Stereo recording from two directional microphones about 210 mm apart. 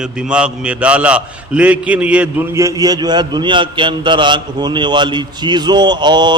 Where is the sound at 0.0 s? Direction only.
5° right (ahead or behind).